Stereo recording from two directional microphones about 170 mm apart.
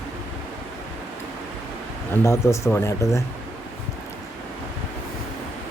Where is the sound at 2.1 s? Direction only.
15° left (ahead or behind).